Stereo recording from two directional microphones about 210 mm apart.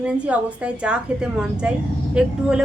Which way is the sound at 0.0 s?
5° right (ahead or behind).